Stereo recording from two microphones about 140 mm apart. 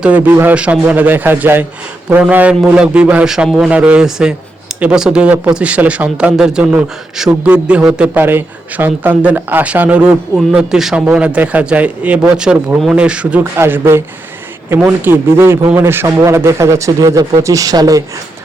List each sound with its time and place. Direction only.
0.0 s a man's voice: 10° right (ahead or behind); by 18.0 s 25° right (ahead or behind)